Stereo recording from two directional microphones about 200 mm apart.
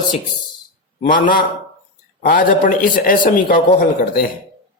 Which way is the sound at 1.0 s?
45° left (ahead or behind).